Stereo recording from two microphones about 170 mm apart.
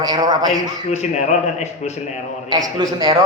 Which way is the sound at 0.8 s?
40° left (ahead or behind).